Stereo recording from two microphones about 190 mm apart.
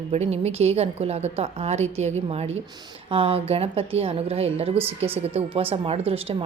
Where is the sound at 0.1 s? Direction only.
35° right (ahead or behind).